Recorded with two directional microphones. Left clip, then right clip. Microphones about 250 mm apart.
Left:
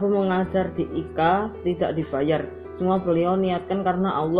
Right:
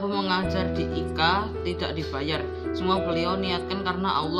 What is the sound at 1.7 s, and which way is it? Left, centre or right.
Speech, centre.